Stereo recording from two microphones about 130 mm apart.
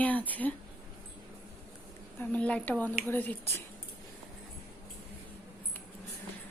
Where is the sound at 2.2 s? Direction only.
10° left (ahead or behind).